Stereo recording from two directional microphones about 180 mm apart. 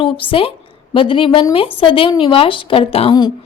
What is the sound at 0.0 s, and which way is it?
A woman's voice, 30° left (ahead or behind).